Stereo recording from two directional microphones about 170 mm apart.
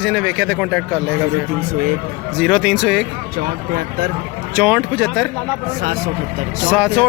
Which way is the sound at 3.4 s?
55° right (ahead or behind).